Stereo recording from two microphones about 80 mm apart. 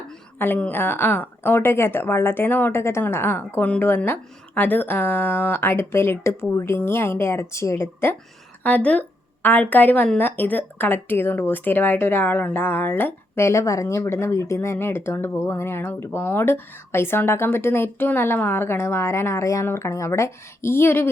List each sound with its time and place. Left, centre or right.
0.3 s a woman's voice: left
8.6 s a woman's voice: centre